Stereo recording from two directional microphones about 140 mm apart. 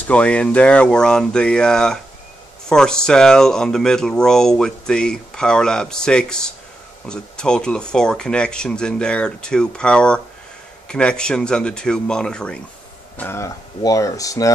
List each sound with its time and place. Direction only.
0.0 s speech: 10° left (ahead or behind)
13.2 s speech: 20° left (ahead or behind)